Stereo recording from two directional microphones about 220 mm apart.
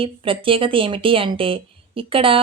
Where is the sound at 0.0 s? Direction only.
25° right (ahead or behind).